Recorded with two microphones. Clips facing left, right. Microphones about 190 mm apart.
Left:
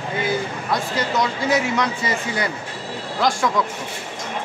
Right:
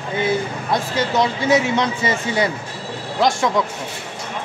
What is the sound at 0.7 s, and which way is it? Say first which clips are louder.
Speech: right 3 dB; 25° right (ahead or behind).